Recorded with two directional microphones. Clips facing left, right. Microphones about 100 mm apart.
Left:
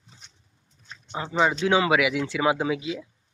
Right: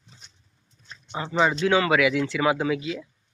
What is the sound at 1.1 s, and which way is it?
Speech, centre (ahead or behind).